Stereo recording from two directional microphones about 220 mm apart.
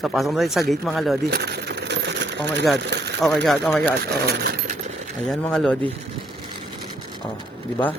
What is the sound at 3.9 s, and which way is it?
Speech, 45° right (ahead or behind).